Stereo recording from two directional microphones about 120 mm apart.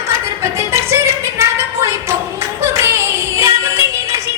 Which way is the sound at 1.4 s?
20° right (ahead or behind).